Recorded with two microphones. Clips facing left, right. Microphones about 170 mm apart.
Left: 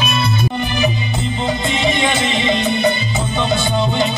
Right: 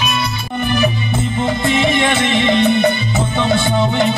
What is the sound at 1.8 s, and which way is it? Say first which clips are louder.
Music: right 2 dB; 60° right (ahead or behind).